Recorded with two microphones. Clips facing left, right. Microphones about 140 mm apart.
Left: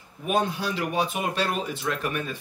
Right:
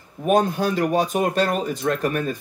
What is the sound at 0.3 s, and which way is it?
Speech, 45° right (ahead or behind).